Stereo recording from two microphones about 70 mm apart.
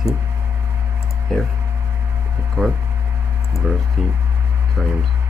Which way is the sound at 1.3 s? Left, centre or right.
Centre.